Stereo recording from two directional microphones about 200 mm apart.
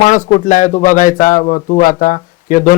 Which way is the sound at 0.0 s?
40° left (ahead or behind).